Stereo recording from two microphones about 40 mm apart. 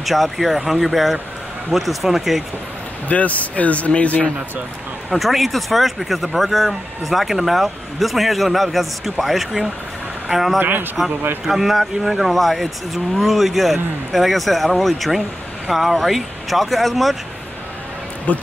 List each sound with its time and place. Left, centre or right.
0.0 s speech: centre
3.1 s speech: left
5.1 s speech: centre
10.6 s speech: right
11.4 s speech: centre
18.3 s speech: left